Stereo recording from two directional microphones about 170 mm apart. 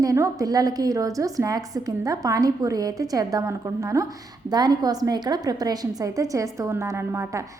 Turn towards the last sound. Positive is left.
turn(degrees=-15)  # may be behind; listen again after turning